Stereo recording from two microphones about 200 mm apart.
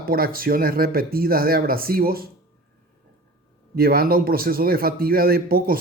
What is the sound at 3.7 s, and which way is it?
A man's voice, 50° right (ahead or behind).